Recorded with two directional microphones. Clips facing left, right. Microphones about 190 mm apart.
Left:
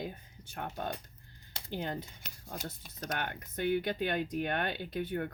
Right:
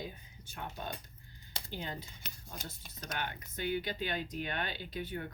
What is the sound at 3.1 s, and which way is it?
Speech, 55° left (ahead or behind).